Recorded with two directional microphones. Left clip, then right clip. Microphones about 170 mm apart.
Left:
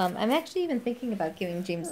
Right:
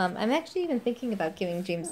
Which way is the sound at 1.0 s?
15° right (ahead or behind).